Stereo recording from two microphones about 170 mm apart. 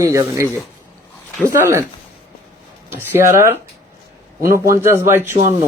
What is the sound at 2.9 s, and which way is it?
Speech, 15° right (ahead or behind).